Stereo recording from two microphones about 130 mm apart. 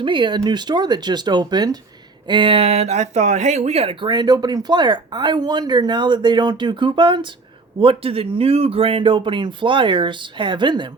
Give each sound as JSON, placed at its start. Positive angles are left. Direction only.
{"t": 0.0, "sound": "speech", "side_deg": -40}
{"t": 4.0, "sound": "speech", "side_deg": -35}